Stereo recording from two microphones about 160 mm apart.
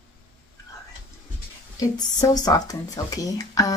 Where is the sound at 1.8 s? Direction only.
25° left (ahead or behind).